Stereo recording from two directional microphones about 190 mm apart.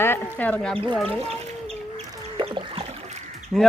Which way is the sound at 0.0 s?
10° left (ahead or behind).